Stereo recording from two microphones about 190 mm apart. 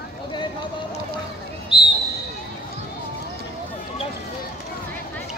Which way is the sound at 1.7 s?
25° left (ahead or behind).